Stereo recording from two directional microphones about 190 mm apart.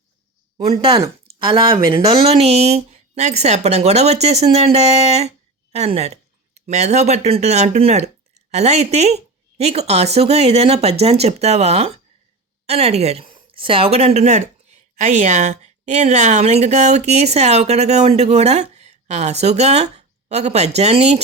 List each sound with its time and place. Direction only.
0.9 s speech: 25° right (ahead or behind)
2.4 s a woman's voice: 35° right (ahead or behind)